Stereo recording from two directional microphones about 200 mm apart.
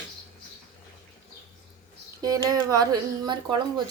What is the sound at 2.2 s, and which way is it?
Speech, 20° right (ahead or behind).